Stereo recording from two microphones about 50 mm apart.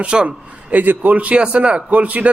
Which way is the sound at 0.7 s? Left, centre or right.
Right.